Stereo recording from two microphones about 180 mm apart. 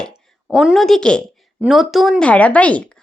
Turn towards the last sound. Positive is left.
turn(degrees=5)  # may be behind; listen again after turning